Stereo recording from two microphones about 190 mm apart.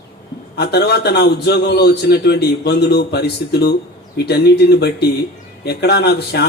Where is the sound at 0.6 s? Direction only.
60° left (ahead or behind).